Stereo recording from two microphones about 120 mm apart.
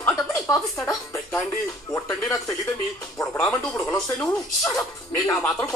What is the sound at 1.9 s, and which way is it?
Speech, 20° left (ahead or behind).